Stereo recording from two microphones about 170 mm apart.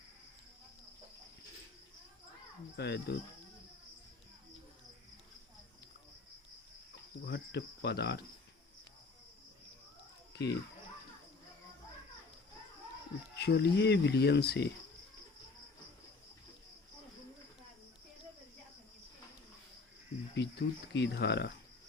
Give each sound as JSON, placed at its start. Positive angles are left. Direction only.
{"t": 2.7, "sound": "speech", "side_deg": 80}
{"t": 7.3, "sound": "speech", "side_deg": 75}
{"t": 10.3, "sound": "speech", "side_deg": 80}
{"t": 13.3, "sound": "speech", "side_deg": 75}
{"t": 20.3, "sound": "speech", "side_deg": 80}